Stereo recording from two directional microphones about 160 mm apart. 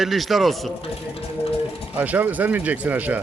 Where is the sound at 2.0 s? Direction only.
10° right (ahead or behind).